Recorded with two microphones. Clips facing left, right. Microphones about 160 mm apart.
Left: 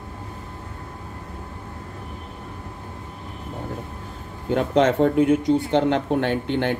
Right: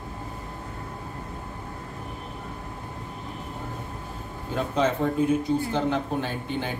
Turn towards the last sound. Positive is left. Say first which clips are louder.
# left 8 dB
turn(degrees=75)  # may be behind; listen again after turning